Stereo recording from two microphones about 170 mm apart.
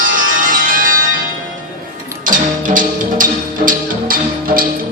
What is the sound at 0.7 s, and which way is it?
Music, 55° right (ahead or behind).